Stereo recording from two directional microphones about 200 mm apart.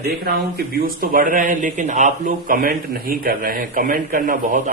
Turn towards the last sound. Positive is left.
turn(degrees=-40)  # may be behind; listen again after turning